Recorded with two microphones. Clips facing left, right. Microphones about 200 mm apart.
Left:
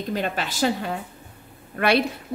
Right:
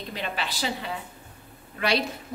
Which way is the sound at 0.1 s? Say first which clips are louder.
Left 5 dB; 45° left (ahead or behind).